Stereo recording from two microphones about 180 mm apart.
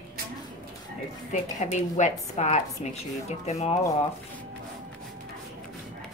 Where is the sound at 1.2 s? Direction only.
40° left (ahead or behind).